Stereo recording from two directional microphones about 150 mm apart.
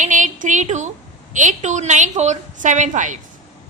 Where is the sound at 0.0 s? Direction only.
55° right (ahead or behind).